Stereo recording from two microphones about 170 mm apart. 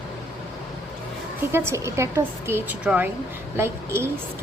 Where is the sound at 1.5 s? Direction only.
15° right (ahead or behind).